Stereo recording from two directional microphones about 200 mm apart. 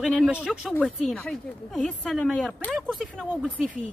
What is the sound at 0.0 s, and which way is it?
Speech, centre (ahead or behind).